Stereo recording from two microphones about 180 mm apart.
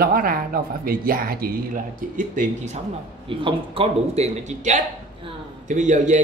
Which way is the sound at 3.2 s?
30° right (ahead or behind).